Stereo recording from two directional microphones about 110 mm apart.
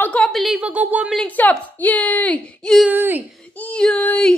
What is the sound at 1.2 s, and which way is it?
A woman's voice, 15° left (ahead or behind).